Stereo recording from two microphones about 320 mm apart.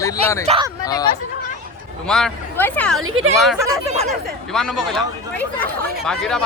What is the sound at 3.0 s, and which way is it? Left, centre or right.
Speech, right.